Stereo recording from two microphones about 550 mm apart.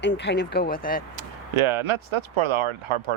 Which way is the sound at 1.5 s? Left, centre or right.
Right.